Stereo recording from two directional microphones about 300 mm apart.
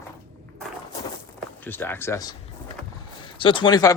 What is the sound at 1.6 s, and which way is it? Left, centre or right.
Speech, centre.